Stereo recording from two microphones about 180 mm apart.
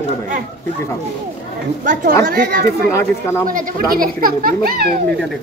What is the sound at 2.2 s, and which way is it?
Speech, 60° right (ahead or behind).